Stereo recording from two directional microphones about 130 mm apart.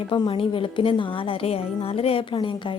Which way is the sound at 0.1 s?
40° left (ahead or behind).